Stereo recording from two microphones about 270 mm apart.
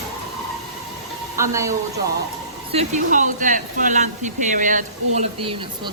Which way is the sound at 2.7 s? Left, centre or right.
Right.